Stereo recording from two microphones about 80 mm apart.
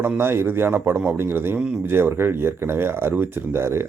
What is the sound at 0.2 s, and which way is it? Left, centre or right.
A man's voice, right.